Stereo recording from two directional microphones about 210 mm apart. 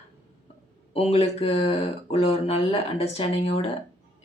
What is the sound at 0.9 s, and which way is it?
Speech, 30° left (ahead or behind).